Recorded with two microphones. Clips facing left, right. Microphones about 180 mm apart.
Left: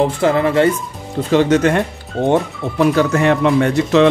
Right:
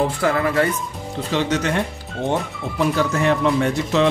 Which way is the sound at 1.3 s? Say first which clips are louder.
Left 8 dB; 50° left (ahead or behind).